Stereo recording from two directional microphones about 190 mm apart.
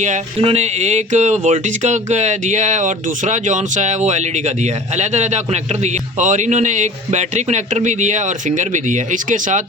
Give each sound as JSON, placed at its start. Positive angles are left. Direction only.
{"t": 0.0, "sound": "speech", "side_deg": -35}